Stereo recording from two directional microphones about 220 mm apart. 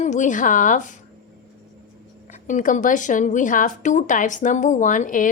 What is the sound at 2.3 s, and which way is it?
Speech, 35° left (ahead or behind).